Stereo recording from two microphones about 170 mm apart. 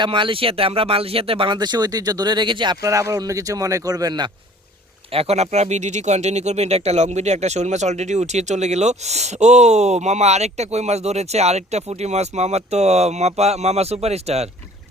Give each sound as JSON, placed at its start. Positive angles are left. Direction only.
{"t": 0.0, "sound": "speech", "side_deg": -30}
{"t": 5.1, "sound": "speech", "side_deg": -35}